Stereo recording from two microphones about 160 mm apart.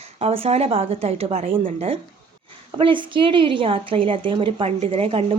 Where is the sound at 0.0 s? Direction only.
40° right (ahead or behind).